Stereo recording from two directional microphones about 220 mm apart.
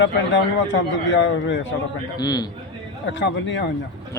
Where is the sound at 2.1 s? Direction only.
15° left (ahead or behind).